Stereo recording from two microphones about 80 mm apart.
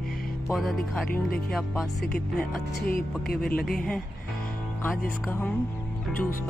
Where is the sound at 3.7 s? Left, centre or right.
Centre.